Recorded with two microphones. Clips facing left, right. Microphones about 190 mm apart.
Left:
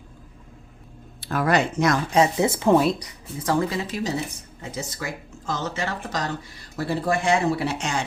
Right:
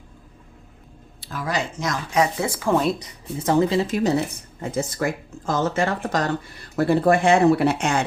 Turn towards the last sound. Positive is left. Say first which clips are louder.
# right 6 dB
turn(degrees=-55)  # may be behind; listen again after turning